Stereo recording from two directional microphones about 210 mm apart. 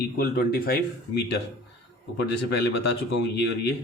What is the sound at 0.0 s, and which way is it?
Speech, 45° left (ahead or behind).